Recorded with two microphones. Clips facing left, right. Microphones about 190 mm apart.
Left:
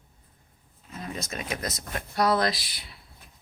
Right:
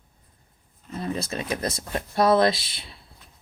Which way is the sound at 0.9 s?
35° right (ahead or behind).